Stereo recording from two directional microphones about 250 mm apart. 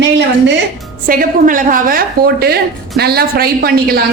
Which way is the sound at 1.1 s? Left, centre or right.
Right.